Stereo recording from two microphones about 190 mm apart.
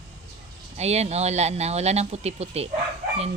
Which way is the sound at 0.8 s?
35° right (ahead or behind).